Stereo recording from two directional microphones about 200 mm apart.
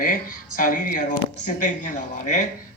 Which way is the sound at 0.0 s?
45° left (ahead or behind).